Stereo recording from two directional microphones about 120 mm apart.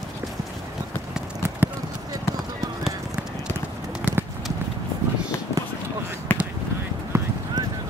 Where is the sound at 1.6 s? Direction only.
15° right (ahead or behind).